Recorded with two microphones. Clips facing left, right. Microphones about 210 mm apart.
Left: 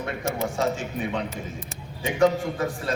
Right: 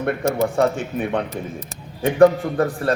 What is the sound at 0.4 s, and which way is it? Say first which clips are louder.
A man's voice: right 6 dB; 60° right (ahead or behind).